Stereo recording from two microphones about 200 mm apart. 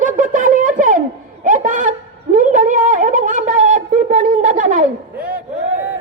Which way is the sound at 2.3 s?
40° right (ahead or behind).